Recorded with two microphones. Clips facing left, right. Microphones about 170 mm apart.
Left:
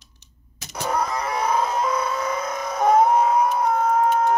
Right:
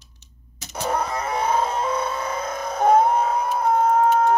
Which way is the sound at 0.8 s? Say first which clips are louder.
Even; 30° right (ahead or behind).